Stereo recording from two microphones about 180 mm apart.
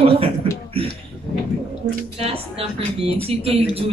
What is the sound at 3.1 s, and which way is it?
Speech, 30° right (ahead or behind).